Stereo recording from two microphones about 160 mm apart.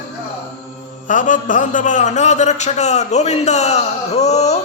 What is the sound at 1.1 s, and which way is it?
A man's voice, 55° left (ahead or behind).